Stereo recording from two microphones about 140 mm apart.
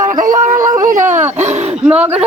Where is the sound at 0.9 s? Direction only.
60° right (ahead or behind).